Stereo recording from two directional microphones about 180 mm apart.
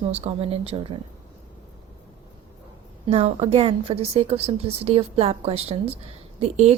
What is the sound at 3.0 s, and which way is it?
A woman's voice, 35° right (ahead or behind).